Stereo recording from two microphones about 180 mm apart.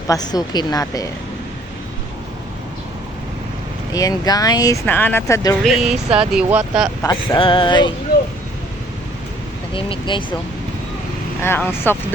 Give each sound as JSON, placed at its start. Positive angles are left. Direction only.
{"t": 0.1, "sound": "speech", "side_deg": 20}
{"t": 3.9, "sound": "speech", "side_deg": 20}
{"t": 5.6, "sound": "speech", "side_deg": 0}
{"t": 7.0, "sound": "speech", "side_deg": 25}
{"t": 9.7, "sound": "speech", "side_deg": 30}
{"t": 11.4, "sound": "speech", "side_deg": 15}